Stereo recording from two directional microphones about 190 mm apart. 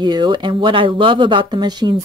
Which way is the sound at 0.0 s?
25° right (ahead or behind).